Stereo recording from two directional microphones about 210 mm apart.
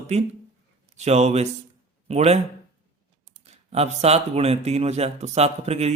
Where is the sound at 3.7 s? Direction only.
30° right (ahead or behind).